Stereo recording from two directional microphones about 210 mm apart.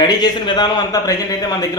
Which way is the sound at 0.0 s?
20° left (ahead or behind).